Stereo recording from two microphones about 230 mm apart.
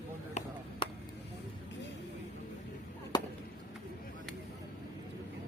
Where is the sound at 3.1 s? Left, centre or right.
Centre.